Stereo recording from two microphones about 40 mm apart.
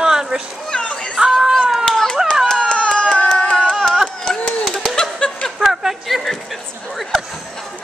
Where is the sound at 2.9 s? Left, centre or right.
Centre.